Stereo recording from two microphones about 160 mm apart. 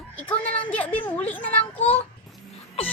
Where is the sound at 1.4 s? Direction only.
35° left (ahead or behind).